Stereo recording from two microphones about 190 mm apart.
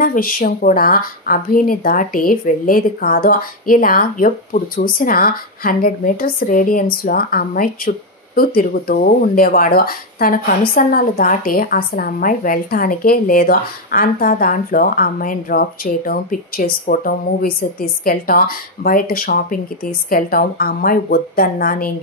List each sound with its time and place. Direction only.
0.0 s a woman's voice: 50° left (ahead or behind)